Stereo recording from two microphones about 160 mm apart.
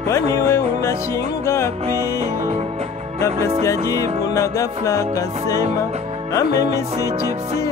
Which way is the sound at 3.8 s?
20° left (ahead or behind).